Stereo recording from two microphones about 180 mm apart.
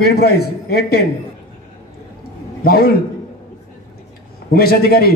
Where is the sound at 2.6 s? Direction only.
55° left (ahead or behind).